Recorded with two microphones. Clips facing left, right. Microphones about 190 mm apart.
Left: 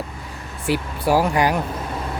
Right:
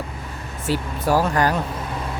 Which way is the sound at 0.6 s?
10° left (ahead or behind).